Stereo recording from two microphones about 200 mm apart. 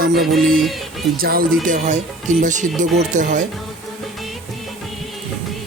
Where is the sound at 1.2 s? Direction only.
45° right (ahead or behind).